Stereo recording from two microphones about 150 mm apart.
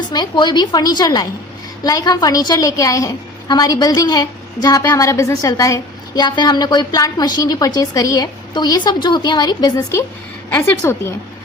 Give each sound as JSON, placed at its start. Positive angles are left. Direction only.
{"t": 0.1, "sound": "a woman's voice", "side_deg": 30}